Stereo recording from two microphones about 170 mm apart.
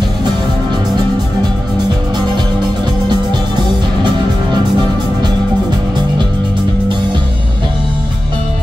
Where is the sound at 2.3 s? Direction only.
25° right (ahead or behind).